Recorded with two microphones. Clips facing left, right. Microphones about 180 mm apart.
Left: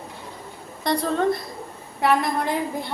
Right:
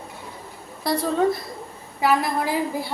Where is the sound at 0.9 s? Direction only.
5° right (ahead or behind).